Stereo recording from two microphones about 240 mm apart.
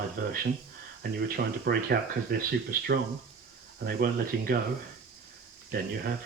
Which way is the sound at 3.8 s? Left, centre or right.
Right.